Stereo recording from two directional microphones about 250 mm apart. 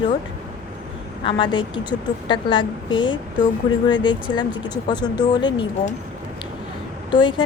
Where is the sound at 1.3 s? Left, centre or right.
Centre.